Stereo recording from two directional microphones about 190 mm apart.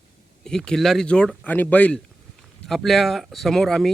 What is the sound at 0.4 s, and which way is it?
Speech, 5° left (ahead or behind).